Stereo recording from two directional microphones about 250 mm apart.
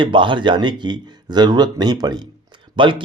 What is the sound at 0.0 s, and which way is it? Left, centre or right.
Speech, centre.